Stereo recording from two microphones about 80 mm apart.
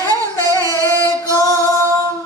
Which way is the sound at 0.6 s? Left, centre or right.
Right.